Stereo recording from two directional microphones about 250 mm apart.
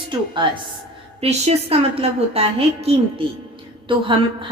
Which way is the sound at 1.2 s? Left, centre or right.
Right.